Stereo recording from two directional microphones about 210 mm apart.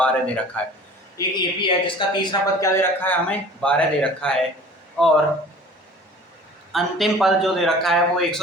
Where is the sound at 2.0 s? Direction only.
25° left (ahead or behind).